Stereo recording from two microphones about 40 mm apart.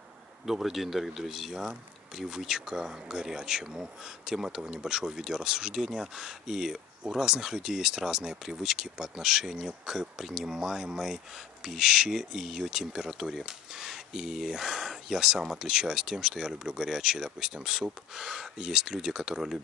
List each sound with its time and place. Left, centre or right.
0.5 s speech: centre